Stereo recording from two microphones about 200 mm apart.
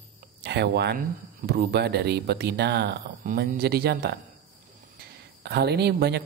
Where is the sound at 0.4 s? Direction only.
55° right (ahead or behind).